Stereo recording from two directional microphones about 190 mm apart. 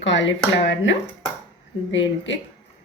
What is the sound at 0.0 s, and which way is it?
A woman's voice, 70° left (ahead or behind).